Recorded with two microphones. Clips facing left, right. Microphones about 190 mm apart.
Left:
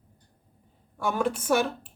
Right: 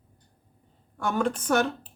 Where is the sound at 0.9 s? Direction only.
10° left (ahead or behind).